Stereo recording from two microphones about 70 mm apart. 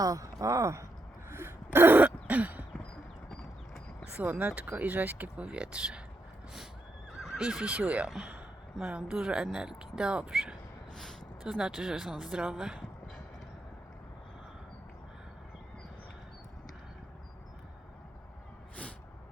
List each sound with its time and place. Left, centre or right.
0.0 s speech: right
1.3 s throat clearing: right
4.2 s speech: right
7.2 s speech: centre